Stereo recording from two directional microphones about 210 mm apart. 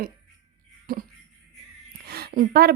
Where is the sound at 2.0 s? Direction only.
50° right (ahead or behind).